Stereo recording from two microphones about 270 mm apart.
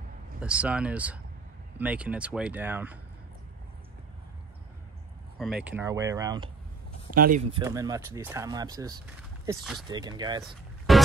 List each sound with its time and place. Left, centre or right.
0.4 s speech: centre
5.4 s speech: centre
7.2 s speech: right
7.5 s speech: centre
10.9 s music: centre